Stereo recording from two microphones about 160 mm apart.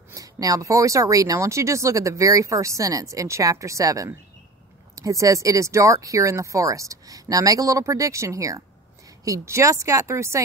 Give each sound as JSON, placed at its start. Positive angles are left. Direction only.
{"t": 0.1, "sound": "speech", "side_deg": -20}